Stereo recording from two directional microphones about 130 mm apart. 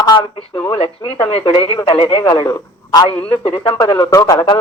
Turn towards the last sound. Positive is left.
turn(degrees=30)  # may be behind; listen again after turning